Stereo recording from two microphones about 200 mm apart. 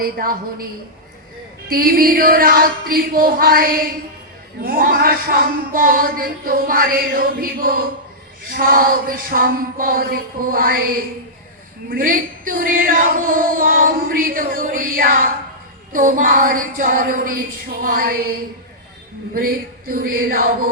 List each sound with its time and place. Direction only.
0.0 s female singing: 45° right (ahead or behind)